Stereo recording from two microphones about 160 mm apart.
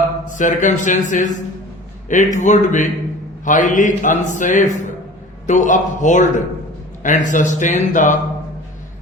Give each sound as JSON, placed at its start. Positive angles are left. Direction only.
{"t": 0.3, "sound": "a man's voice", "side_deg": 50}